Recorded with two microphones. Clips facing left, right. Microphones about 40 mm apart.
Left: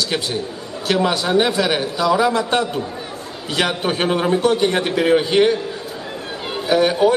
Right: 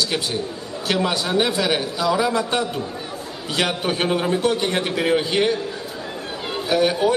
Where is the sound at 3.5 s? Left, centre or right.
Left.